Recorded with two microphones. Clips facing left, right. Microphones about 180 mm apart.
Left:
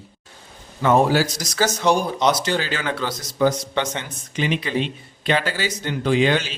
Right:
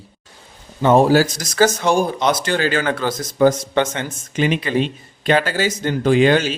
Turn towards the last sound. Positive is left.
turn(degrees=-50)  # may be behind; listen again after turning